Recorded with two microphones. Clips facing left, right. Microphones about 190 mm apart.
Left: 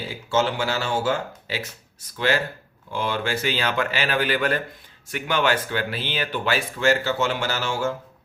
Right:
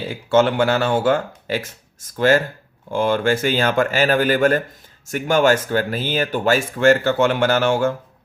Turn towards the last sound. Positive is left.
turn(degrees=-55)  # may be behind; listen again after turning